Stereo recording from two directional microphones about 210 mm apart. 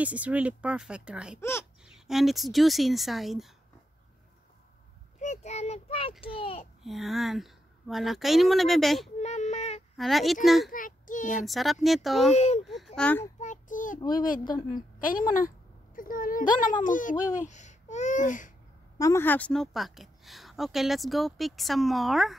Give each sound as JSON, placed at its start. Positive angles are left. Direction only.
{"t": 0.0, "sound": "a woman's voice", "side_deg": -5}
{"t": 5.2, "sound": "a child's voice", "side_deg": 35}
{"t": 6.8, "sound": "a woman's voice", "side_deg": 0}
{"t": 9.2, "sound": "a sound", "side_deg": 35}
{"t": 9.9, "sound": "a woman's voice", "side_deg": 0}
{"t": 10.7, "sound": "a child's voice", "side_deg": 40}
{"t": 11.2, "sound": "a woman's voice", "side_deg": 0}
{"t": 12.4, "sound": "a woman's voice", "side_deg": 30}
{"t": 12.6, "sound": "a woman's voice", "side_deg": 0}
{"t": 13.4, "sound": "child singing", "side_deg": 35}
{"t": 14.1, "sound": "a woman's voice", "side_deg": 40}
{"t": 18.9, "sound": "a woman's voice", "side_deg": 15}